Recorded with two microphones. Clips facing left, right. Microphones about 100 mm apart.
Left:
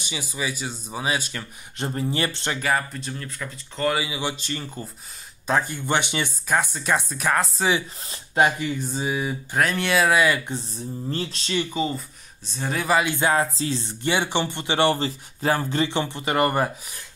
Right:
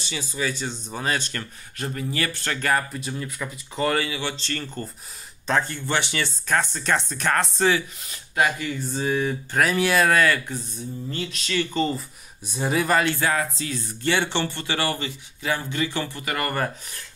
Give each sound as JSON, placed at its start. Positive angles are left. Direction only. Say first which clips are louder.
{"t": 0.0, "sound": "speech", "louder": "right 1 dB", "side_deg": 15}
{"t": 1.8, "sound": "speech", "louder": "left 2 dB", "side_deg": 30}
{"t": 2.6, "sound": "speech", "louder": "right 1 dB", "side_deg": 0}
{"t": 3.9, "sound": "speech", "louder": "right 1 dB", "side_deg": 15}
{"t": 8.0, "sound": "speech", "louder": "left 3 dB", "side_deg": 30}
{"t": 9.6, "sound": "speech", "louder": "right 1 dB", "side_deg": 0}
{"t": 11.1, "sound": "speech", "louder": "left 2 dB", "side_deg": 35}
{"t": 11.6, "sound": "speech", "louder": "right 4 dB", "side_deg": 5}
{"t": 12.4, "sound": "speech", "louder": "right 1 dB", "side_deg": -5}
{"t": 13.1, "sound": "speech", "louder": "left 3 dB", "side_deg": 20}
{"t": 15.9, "sound": "speech", "louder": "left 4 dB", "side_deg": 20}